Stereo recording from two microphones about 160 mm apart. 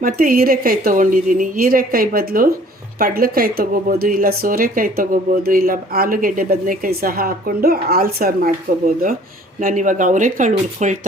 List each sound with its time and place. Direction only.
0.0 s a woman's voice: 65° right (ahead or behind)
9.6 s speech: 55° right (ahead or behind)